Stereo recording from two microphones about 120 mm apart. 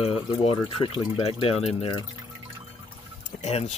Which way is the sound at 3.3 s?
70° left (ahead or behind).